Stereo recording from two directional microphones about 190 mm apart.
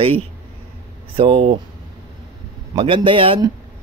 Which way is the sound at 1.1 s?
30° right (ahead or behind).